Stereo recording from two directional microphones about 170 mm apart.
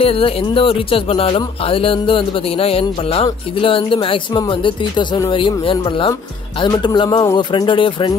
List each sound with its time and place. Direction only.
0.0 s speech: 35° left (ahead or behind)